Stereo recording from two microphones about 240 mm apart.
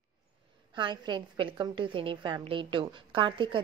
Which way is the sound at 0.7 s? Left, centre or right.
Centre.